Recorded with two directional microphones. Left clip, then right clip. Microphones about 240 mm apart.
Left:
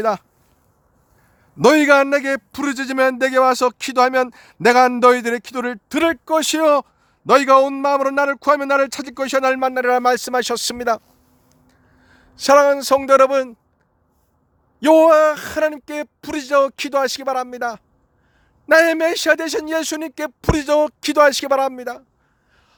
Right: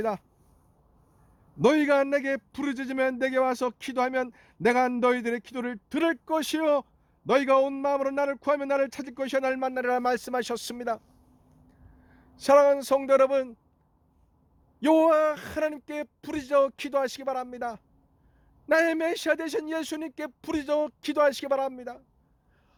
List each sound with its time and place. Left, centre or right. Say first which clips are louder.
1.5 s a man's voice: left 10 dB; left
14.8 s speech: left 10 dB; centre